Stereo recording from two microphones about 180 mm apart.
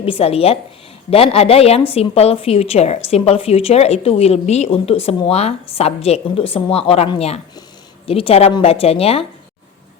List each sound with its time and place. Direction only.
0.0 s a woman's voice: 30° left (ahead or behind)